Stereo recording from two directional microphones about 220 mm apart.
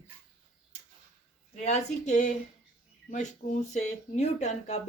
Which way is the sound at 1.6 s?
30° left (ahead or behind).